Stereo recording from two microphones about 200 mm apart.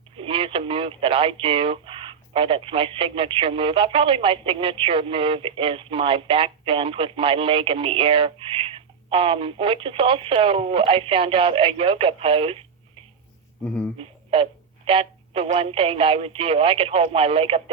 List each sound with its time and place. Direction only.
0.2 s speech: 25° right (ahead or behind)
14.0 s a sound: 30° right (ahead or behind)
14.8 s speech: 30° right (ahead or behind)